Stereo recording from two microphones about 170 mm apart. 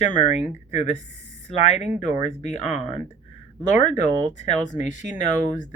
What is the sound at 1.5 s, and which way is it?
Speech, 40° left (ahead or behind).